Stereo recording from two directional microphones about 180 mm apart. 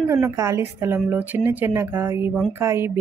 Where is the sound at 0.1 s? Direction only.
15° right (ahead or behind).